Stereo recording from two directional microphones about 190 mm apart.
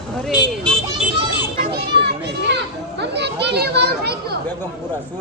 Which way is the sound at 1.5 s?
55° right (ahead or behind).